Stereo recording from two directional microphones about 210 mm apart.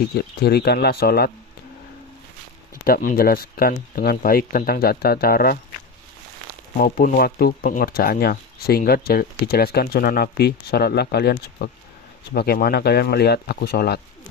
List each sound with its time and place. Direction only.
0.1 s speech: 50° left (ahead or behind)
2.8 s speech: 40° left (ahead or behind)
6.7 s speech: 45° left (ahead or behind)